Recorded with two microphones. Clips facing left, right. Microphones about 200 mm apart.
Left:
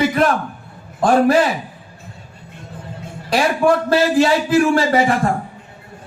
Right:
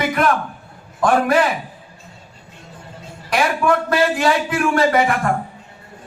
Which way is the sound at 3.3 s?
30° left (ahead or behind).